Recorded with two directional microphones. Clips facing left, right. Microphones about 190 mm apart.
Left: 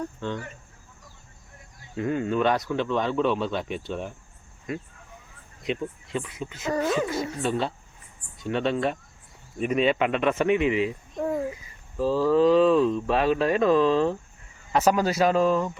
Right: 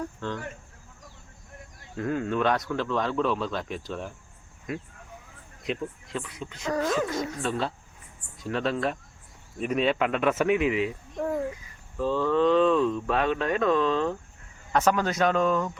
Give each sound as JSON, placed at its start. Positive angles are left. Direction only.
{"t": 0.2, "sound": "speech", "side_deg": 0}
{"t": 2.0, "sound": "speech", "side_deg": 5}
{"t": 5.6, "sound": "speech", "side_deg": 0}
{"t": 11.9, "sound": "speech", "side_deg": 35}
{"t": 12.3, "sound": "speech", "side_deg": 5}